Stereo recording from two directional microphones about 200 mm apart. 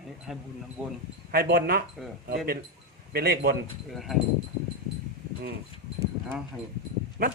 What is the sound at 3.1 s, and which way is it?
Speech, 50° right (ahead or behind).